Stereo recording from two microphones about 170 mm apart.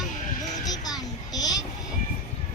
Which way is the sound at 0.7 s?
20° left (ahead or behind).